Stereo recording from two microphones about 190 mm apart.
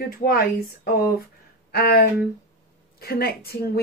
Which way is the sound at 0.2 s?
50° left (ahead or behind).